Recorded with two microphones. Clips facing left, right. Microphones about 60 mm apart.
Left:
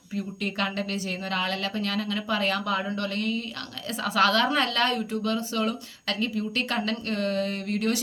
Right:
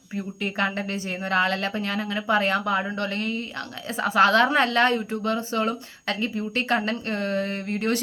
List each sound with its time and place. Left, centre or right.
0.4 s a woman's voice: right